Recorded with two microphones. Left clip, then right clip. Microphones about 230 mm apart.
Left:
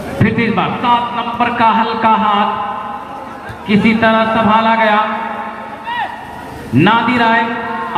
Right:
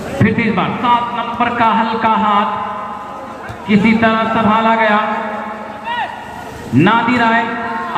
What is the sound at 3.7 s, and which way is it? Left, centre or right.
A man's voice, left.